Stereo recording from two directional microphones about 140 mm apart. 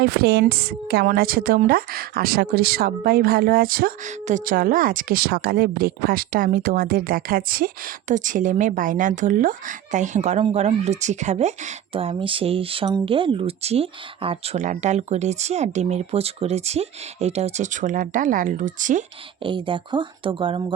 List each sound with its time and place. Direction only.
0.0 s a woman's voice: 90° right; by 14.6 s 45° right (ahead or behind)
14.6 s speech: 60° right (ahead or behind)
19.4 s speech: 35° right (ahead or behind)